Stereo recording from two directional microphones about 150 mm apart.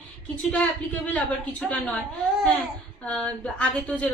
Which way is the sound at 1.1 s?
10° left (ahead or behind).